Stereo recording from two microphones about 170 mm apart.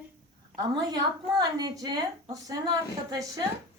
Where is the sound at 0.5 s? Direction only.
25° right (ahead or behind).